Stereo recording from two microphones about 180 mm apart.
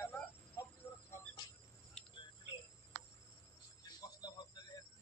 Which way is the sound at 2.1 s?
25° left (ahead or behind).